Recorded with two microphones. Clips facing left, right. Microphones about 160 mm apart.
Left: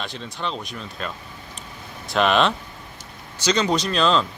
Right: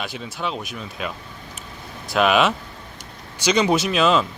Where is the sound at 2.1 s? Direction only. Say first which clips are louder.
Right 1 dB; 5° right (ahead or behind).